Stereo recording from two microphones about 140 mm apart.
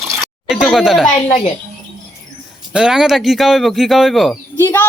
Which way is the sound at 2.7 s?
5° right (ahead or behind).